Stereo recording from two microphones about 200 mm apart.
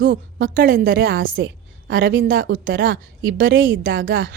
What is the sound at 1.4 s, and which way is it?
Speech, 60° right (ahead or behind).